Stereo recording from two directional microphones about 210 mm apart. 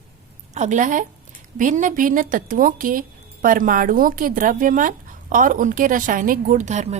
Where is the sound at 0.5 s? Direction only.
35° right (ahead or behind).